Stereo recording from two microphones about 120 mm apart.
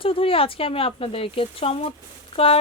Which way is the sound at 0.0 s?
50° left (ahead or behind).